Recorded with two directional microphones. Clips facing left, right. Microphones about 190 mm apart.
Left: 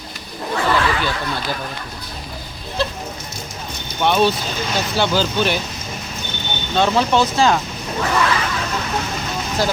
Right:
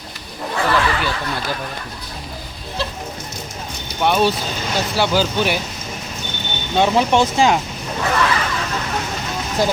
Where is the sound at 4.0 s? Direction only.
5° right (ahead or behind).